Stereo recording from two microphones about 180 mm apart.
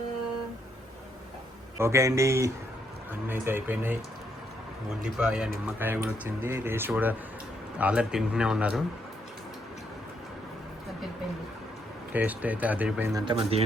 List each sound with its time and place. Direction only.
1.8 s speech: 15° right (ahead or behind)
5.0 s a man's voice: 5° right (ahead or behind)
12.1 s speech: 10° right (ahead or behind)
13.1 s speech: 30° right (ahead or behind)